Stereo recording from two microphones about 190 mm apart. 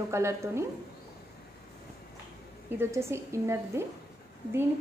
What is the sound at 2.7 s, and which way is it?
A woman's voice, 15° right (ahead or behind).